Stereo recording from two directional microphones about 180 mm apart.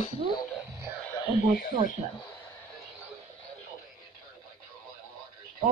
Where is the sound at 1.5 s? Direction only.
55° left (ahead or behind).